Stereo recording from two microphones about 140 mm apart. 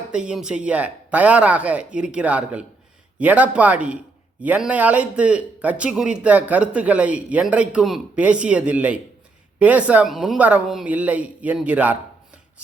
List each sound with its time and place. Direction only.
0.1 s a man's voice: 5° right (ahead or behind)